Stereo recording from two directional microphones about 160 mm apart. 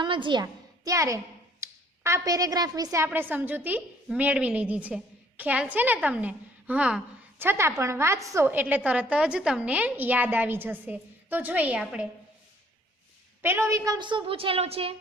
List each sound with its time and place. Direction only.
0.0 s a woman's voice: 30° right (ahead or behind); by 12.0 s 5° right (ahead or behind)
13.4 s a woman's voice: 15° right (ahead or behind); by 14.9 s 35° right (ahead or behind)